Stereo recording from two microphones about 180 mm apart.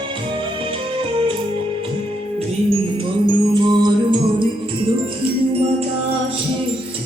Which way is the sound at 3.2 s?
25° right (ahead or behind).